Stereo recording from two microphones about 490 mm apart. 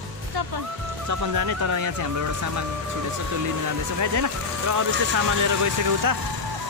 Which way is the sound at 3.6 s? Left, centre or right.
Right.